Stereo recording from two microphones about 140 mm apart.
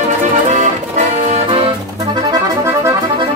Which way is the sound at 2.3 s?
20° right (ahead or behind).